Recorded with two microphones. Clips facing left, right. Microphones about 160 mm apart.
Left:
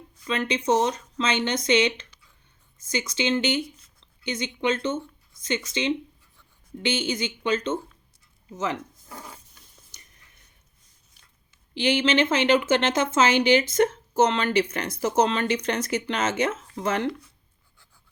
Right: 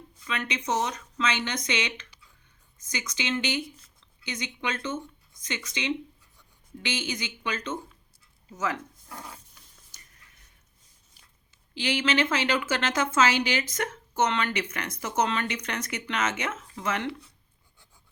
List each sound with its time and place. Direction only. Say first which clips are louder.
0.3 s speech: left 7 dB; 30° left (ahead or behind)
11.7 s speech: left 5 dB; 25° left (ahead or behind)